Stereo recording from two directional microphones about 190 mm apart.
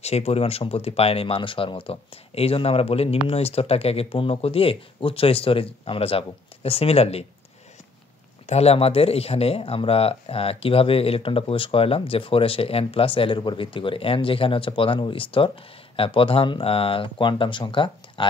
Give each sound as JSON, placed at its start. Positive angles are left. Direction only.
{"t": 0.0, "sound": "speech", "side_deg": 35}
{"t": 8.5, "sound": "speech", "side_deg": 35}